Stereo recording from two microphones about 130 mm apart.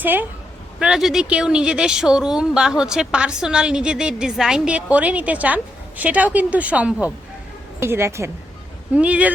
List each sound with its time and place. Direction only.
0.0 s a woman's voice: 15° right (ahead or behind)
0.8 s a woman's voice: 5° right (ahead or behind); by 8.3 s 20° right (ahead or behind)
9.0 s a woman's voice: 10° right (ahead or behind)